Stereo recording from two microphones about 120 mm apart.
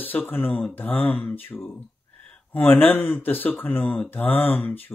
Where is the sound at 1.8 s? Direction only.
15° left (ahead or behind).